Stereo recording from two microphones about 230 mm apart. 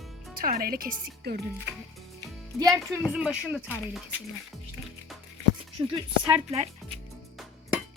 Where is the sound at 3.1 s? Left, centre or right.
Centre.